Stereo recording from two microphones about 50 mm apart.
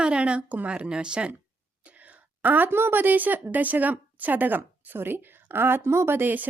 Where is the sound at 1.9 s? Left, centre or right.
Right.